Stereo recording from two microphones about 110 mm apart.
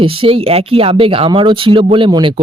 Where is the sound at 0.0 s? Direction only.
55° right (ahead or behind).